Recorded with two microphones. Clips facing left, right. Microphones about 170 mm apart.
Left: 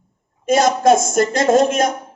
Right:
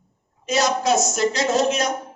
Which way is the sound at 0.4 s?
50° left (ahead or behind).